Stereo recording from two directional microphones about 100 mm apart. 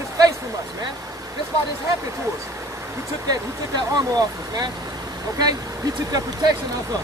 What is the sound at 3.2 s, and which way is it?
Speech, 40° right (ahead or behind).